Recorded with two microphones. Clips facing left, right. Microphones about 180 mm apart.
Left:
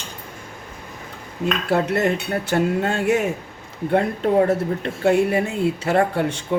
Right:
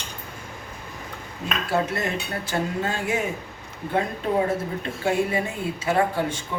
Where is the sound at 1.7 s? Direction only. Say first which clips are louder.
Left 5 dB; 65° left (ahead or behind).